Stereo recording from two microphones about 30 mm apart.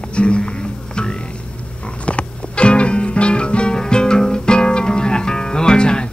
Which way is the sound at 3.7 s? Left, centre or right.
Left.